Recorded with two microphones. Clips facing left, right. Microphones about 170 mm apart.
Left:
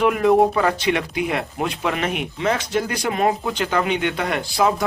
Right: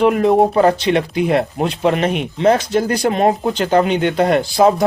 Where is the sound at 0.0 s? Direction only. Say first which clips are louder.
Right 3 dB; 30° right (ahead or behind).